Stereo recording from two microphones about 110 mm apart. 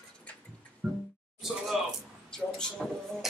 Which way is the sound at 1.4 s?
Centre (ahead or behind).